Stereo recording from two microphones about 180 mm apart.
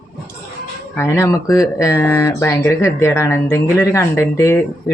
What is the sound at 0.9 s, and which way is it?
Speech, 15° left (ahead or behind).